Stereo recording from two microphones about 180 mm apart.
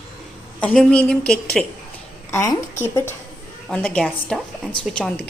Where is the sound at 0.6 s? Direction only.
5° left (ahead or behind).